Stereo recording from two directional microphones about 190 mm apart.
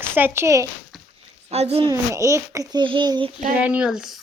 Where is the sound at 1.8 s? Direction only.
15° right (ahead or behind).